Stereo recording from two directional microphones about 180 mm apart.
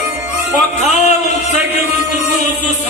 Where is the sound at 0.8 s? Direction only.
40° left (ahead or behind).